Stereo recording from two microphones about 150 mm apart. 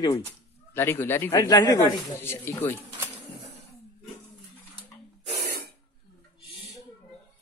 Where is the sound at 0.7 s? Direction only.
15° left (ahead or behind).